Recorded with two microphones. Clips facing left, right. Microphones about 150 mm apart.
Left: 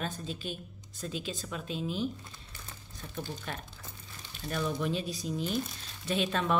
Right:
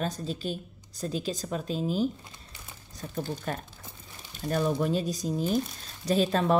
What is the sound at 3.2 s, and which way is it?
A woman's voice, 45° right (ahead or behind).